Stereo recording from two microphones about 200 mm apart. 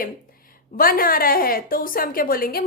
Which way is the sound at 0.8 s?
45° left (ahead or behind).